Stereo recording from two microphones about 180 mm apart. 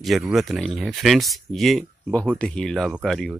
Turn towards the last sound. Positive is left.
turn(degrees=0)  # may be behind; listen again after turning